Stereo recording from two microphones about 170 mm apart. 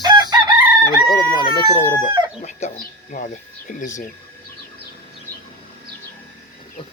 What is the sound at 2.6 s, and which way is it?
Speech, 40° left (ahead or behind).